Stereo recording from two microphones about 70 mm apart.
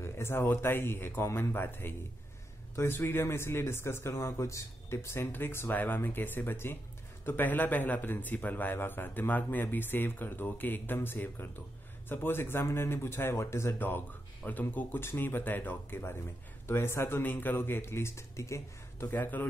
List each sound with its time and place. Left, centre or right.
0.0 s a man's voice: left
13.7 s a man's voice: left
17.2 s speech: left